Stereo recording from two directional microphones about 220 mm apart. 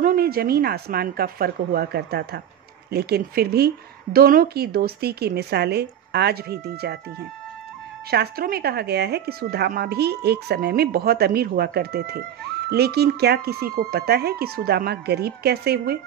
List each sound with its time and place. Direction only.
0.0 s speech: 40° right (ahead or behind)
8.1 s speech: 45° right (ahead or behind)